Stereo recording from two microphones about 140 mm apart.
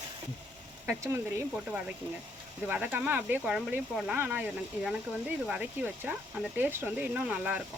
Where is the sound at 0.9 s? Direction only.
15° right (ahead or behind).